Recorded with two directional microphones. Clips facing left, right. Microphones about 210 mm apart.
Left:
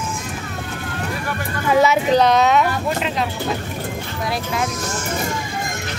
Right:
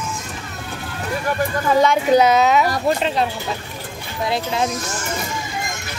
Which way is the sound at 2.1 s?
5° right (ahead or behind).